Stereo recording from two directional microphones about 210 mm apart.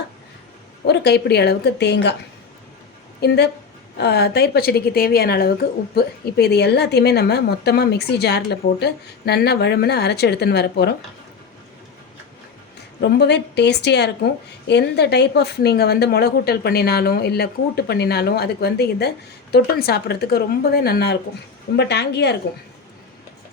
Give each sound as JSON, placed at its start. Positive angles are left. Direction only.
{"t": 0.9, "sound": "speech", "side_deg": 50}
{"t": 3.2, "sound": "speech", "side_deg": 50}
{"t": 13.0, "sound": "speech", "side_deg": 55}